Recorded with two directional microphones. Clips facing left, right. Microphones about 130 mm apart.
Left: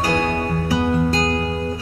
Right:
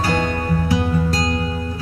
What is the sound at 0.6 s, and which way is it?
Music, 30° left (ahead or behind).